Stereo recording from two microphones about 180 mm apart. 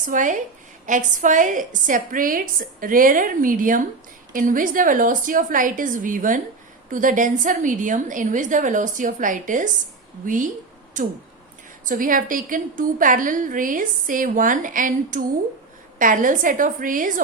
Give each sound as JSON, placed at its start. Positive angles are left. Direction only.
{"t": 0.0, "sound": "a woman's voice", "side_deg": -45}